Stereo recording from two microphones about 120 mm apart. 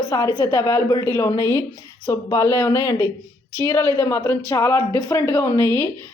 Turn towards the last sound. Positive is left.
turn(degrees=20)  # may be behind; listen again after turning